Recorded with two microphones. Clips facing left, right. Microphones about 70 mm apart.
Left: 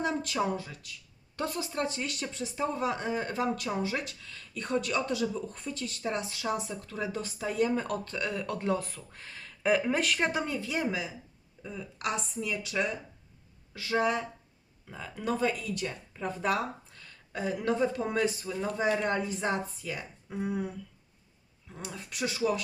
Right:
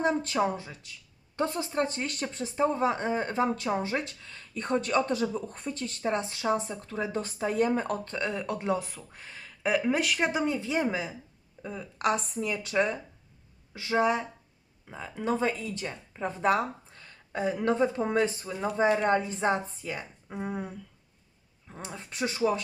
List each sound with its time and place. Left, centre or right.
0.0 s a woman's voice: right; by 10.4 s centre
10.4 s speech: right
11.9 s a woman's voice: right
13.7 s a woman's voice: centre